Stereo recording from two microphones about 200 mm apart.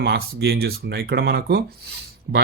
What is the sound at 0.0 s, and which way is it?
Speech, 55° right (ahead or behind).